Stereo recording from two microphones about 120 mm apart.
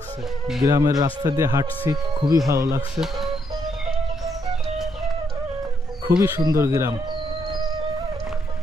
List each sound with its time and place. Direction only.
0.7 s speech: 30° right (ahead or behind)
6.0 s speech: 20° right (ahead or behind)